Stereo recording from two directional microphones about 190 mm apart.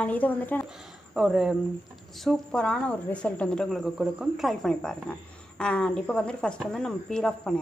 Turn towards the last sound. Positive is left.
turn(degrees=5)  # may be behind; listen again after turning